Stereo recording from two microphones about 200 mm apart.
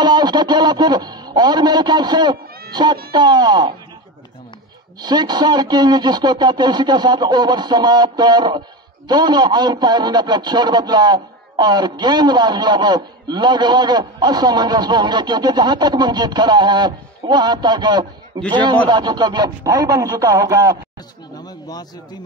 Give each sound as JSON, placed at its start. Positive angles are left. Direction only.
{"t": 0.0, "sound": "speech", "side_deg": -20}
{"t": 5.0, "sound": "speech", "side_deg": -20}
{"t": 21.4, "sound": "a sound", "side_deg": 20}